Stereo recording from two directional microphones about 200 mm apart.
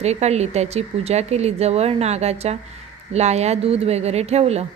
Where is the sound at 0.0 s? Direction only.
35° right (ahead or behind).